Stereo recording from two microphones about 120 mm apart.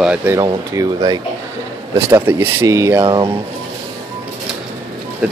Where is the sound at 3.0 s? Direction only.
40° right (ahead or behind).